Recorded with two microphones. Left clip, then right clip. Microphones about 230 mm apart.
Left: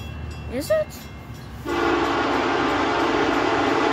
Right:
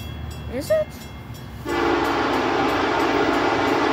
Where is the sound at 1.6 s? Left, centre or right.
Centre.